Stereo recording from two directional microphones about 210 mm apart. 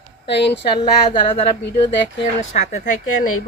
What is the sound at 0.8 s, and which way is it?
Speech, 20° left (ahead or behind).